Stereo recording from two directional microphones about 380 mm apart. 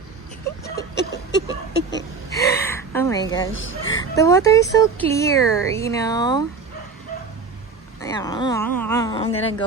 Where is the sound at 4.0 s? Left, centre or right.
Centre.